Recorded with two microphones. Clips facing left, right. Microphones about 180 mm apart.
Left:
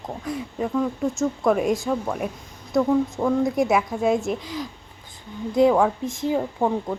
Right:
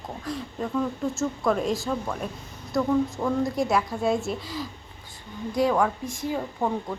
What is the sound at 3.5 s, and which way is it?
Speech, 20° left (ahead or behind).